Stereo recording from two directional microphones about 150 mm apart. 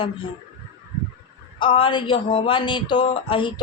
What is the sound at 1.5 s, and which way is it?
Speech, 35° left (ahead or behind).